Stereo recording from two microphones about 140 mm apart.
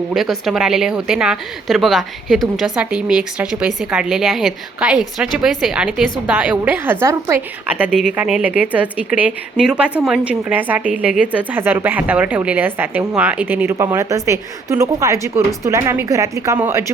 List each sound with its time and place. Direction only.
0.1 s a woman's voice: centre (ahead or behind); by 7.4 s 20° right (ahead or behind)
7.7 s speech: 5° right (ahead or behind)